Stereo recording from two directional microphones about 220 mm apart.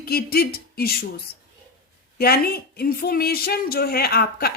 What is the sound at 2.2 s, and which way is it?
A woman's voice, 45° left (ahead or behind).